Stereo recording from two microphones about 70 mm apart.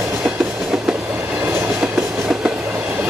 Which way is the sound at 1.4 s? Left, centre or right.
Right.